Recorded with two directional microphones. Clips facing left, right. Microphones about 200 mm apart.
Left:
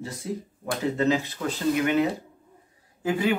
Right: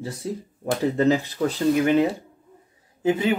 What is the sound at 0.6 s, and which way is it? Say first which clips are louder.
Speech: right 4 dB; 35° right (ahead or behind).